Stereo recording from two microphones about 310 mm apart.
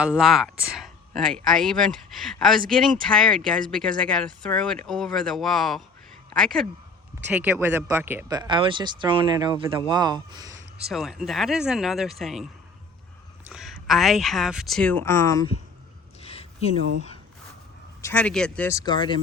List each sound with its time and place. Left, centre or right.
0.0 s speech: centre
10.8 s speech: centre
13.5 s speech: centre
16.2 s a sound: centre
18.0 s speech: centre